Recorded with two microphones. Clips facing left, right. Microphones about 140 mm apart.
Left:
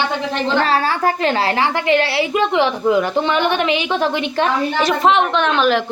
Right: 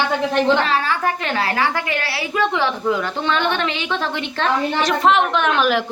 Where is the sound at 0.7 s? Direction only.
35° left (ahead or behind); by 4.8 s 15° left (ahead or behind).